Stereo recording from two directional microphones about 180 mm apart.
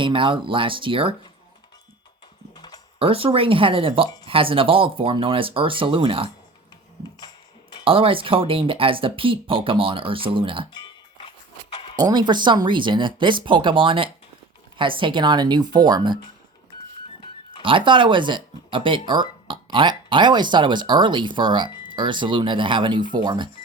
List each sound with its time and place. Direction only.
0.0 s speech: 30° right (ahead or behind)
2.6 s typing: 20° left (ahead or behind)
3.0 s speech: 30° right (ahead or behind)
7.9 s speech: 30° right (ahead or behind)
10.7 s music: 25° left (ahead or behind)
11.9 s speech: 25° right (ahead or behind)
17.6 s speech: 30° right (ahead or behind)